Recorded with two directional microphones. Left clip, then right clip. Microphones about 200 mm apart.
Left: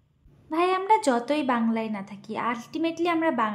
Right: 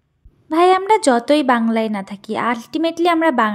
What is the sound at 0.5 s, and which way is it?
A woman's voice, 40° right (ahead or behind).